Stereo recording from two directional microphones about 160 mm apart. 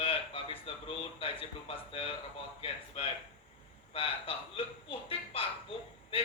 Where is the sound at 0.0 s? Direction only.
35° left (ahead or behind).